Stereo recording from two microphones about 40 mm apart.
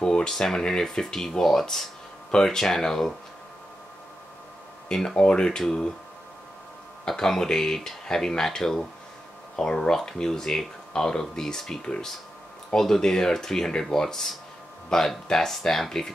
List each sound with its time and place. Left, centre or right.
0.0 s speech: centre
4.8 s speech: centre
7.1 s speech: centre